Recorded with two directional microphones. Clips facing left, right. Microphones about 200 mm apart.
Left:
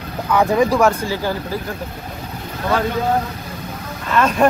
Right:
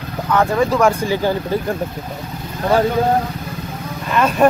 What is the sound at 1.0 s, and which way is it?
Speech, 20° right (ahead or behind).